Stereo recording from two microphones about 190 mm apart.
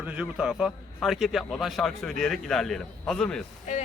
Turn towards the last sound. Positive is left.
turn(degrees=40)  # may be behind; listen again after turning